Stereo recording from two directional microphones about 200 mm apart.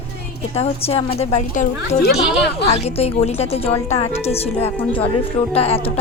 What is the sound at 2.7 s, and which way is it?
A woman's voice, 30° left (ahead or behind).